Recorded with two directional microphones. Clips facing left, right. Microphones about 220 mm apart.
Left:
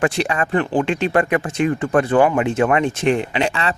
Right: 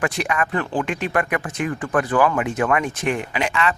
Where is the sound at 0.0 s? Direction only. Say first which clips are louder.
Left 3 dB; 30° left (ahead or behind).